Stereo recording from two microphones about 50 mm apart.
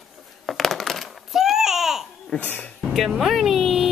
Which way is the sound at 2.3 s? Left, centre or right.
Centre.